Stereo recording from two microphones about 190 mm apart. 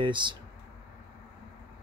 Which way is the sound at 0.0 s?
25° right (ahead or behind).